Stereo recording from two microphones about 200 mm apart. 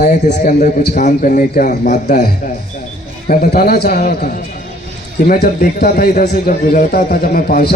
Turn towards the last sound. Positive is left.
turn(degrees=50)  # may be behind; listen again after turning